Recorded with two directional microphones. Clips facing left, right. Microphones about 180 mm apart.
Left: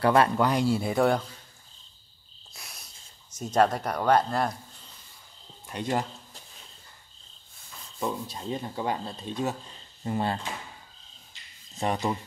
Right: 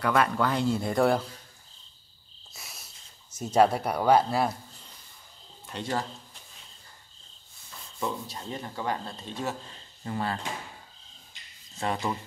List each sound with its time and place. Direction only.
0.0 s speech: 30° left (ahead or behind)
0.4 s speech: 15° left (ahead or behind); by 1.2 s centre (ahead or behind)
2.5 s a sound: centre (ahead or behind)
5.7 s speech: 15° left (ahead or behind)
8.0 s speech: 20° left (ahead or behind)
11.7 s speech: 20° left (ahead or behind)